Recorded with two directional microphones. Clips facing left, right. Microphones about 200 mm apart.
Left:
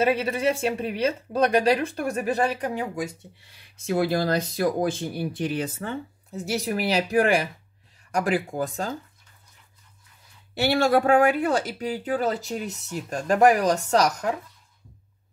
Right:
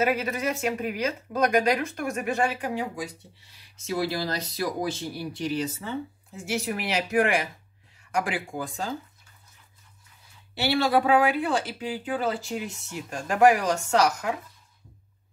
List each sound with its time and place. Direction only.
0.0 s speech: 30° left (ahead or behind)
3.7 s speech: 55° left (ahead or behind)
6.3 s speech: 40° left (ahead or behind)
10.5 s speech: 45° left (ahead or behind)